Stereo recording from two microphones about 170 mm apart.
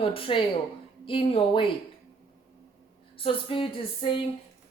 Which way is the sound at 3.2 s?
30° left (ahead or behind).